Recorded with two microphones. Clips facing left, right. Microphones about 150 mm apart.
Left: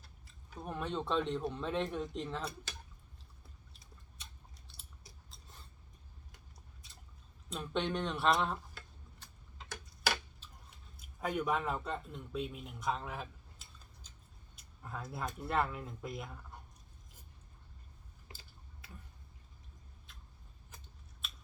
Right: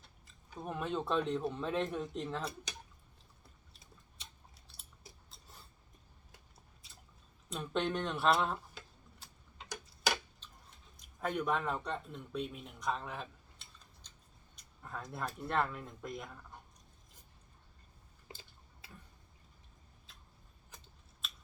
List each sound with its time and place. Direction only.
0.0 s speech: centre (ahead or behind)
5.3 s a sound: centre (ahead or behind)
7.5 s speech: centre (ahead or behind)
9.2 s tick-tock: centre (ahead or behind)
10.0 s a sound: 5° left (ahead or behind)
15.4 s speech: 5° left (ahead or behind)
20.7 s scissors: centre (ahead or behind)